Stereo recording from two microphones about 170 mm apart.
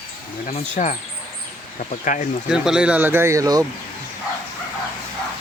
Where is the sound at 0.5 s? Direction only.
45° left (ahead or behind).